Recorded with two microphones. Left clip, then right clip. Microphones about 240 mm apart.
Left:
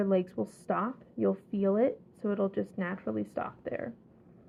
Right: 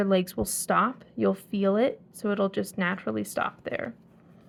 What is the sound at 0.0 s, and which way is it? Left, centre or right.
Speech, right.